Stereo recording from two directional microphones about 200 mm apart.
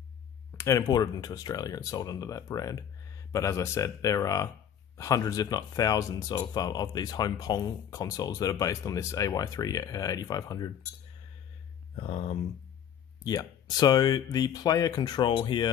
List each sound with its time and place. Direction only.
0.6 s speech: 15° left (ahead or behind)
12.0 s speech: 30° left (ahead or behind)
13.2 s speech: 20° left (ahead or behind)